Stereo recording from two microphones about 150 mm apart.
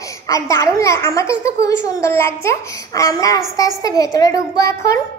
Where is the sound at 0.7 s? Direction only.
20° left (ahead or behind).